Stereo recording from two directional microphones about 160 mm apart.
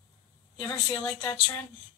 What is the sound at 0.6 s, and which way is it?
Speech, 10° left (ahead or behind).